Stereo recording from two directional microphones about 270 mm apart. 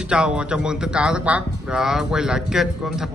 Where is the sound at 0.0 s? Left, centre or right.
Centre.